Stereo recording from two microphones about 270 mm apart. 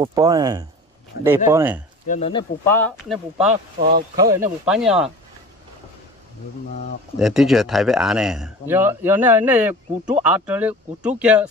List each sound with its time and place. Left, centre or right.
0.0 s speech: centre
2.0 s speech: left
2.6 s a man's voice: centre
4.2 s speech: centre
4.6 s a man's voice: centre
7.2 s a man's voice: centre